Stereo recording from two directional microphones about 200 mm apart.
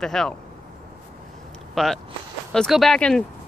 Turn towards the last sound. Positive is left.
turn(degrees=5)  # may be behind; listen again after turning